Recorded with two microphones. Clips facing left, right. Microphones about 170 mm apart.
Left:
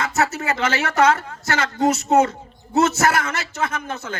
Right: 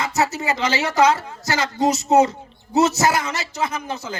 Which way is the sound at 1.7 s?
20° right (ahead or behind).